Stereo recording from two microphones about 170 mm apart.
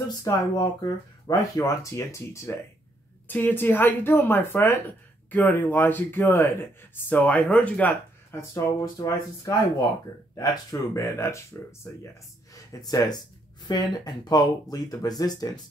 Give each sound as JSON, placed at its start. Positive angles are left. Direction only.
{"t": 0.1, "sound": "speech", "side_deg": 20}